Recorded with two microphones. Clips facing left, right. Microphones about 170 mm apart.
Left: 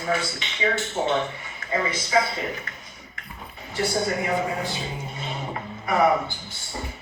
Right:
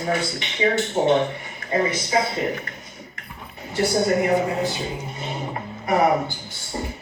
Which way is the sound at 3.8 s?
40° right (ahead or behind).